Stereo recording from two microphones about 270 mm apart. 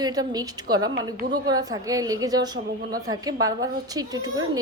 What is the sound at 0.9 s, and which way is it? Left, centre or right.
Speech, right.